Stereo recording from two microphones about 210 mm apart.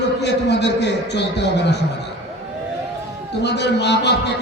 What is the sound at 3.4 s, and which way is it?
Speech, 55° left (ahead or behind).